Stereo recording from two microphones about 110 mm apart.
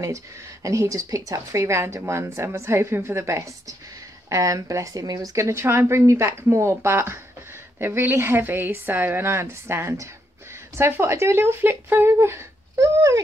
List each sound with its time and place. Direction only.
0.0 s speech: 30° right (ahead or behind)